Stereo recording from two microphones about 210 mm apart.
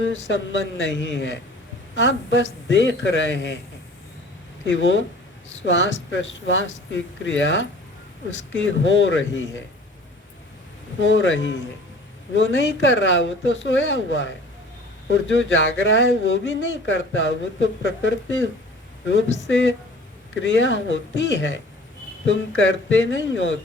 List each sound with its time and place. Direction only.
0.0 s speech: 60° left (ahead or behind)
4.6 s speech: 60° left (ahead or behind)
11.0 s speech: 60° left (ahead or behind)